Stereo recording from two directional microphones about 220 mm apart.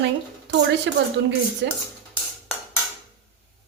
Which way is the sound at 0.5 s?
55° right (ahead or behind).